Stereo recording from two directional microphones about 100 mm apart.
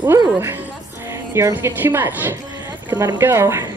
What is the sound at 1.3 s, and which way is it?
A woman's voice, 25° right (ahead or behind).